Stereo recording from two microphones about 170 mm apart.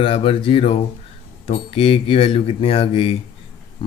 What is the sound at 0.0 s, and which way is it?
Speech, 35° left (ahead or behind).